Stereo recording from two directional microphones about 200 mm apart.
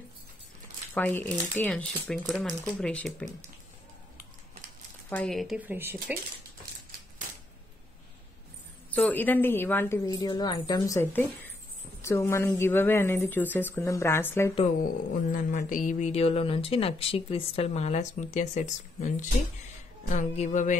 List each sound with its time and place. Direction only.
0.9 s a woman's voice: 10° left (ahead or behind)
5.1 s speech: centre (ahead or behind)
8.9 s a woman's voice: 10° left (ahead or behind)
15.3 s speech: 40° left (ahead or behind)